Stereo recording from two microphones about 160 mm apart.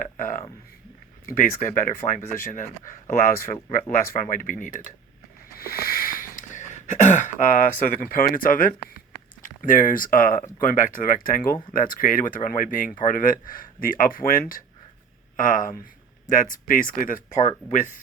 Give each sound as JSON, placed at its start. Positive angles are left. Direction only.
{"t": 0.0, "sound": "speech", "side_deg": 60}
{"t": 5.5, "sound": "a sound", "side_deg": 70}
{"t": 9.4, "sound": "speech", "side_deg": 55}